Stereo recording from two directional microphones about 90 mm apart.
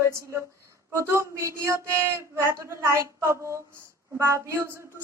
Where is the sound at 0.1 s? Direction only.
30° right (ahead or behind).